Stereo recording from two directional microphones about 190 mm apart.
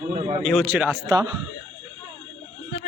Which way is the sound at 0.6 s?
10° right (ahead or behind).